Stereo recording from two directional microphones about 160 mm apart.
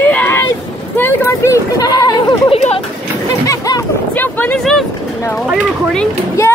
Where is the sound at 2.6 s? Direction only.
40° left (ahead or behind).